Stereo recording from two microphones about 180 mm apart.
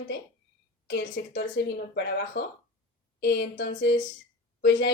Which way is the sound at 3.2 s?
70° left (ahead or behind).